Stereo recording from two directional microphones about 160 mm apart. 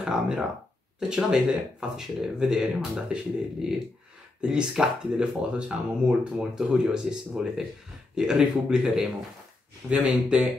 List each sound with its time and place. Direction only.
0.0 s speech: 5° right (ahead or behind)
4.4 s speech: 5° right (ahead or behind)